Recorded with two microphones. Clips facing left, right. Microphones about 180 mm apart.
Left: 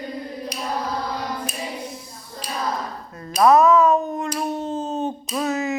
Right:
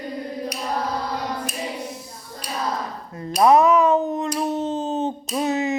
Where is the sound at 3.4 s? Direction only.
20° right (ahead or behind).